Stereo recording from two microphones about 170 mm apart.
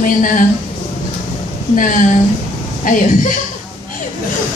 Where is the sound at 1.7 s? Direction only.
50° left (ahead or behind).